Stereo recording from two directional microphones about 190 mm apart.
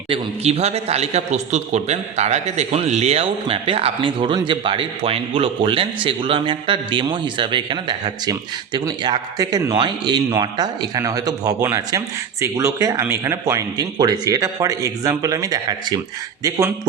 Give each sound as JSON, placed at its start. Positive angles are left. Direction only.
{"t": 0.1, "sound": "a man's voice", "side_deg": -35}